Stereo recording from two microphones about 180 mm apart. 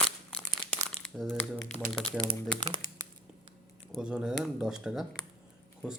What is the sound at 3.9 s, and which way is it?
Speech, 5° right (ahead or behind).